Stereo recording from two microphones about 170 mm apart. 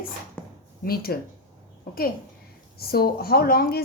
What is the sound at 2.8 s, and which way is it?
A woman's voice, 65° left (ahead or behind).